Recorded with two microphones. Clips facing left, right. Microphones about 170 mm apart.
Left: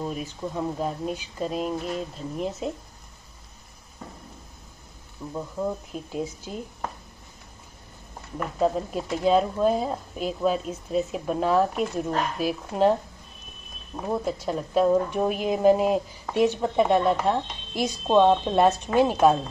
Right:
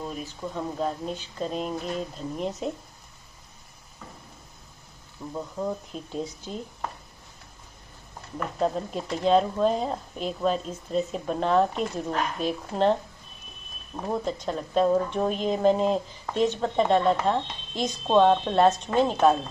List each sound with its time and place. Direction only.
0.0 s speech: 10° left (ahead or behind)
5.3 s a woman's voice: 5° left (ahead or behind)
8.4 s a woman's voice: 5° left (ahead or behind)
14.0 s a woman's voice: 5° left (ahead or behind)